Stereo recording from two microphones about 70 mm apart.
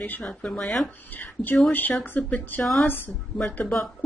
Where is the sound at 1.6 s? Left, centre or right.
Left.